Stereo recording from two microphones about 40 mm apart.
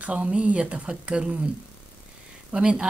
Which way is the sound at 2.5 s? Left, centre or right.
Right.